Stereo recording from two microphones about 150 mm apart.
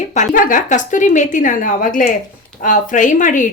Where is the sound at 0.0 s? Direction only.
50° left (ahead or behind).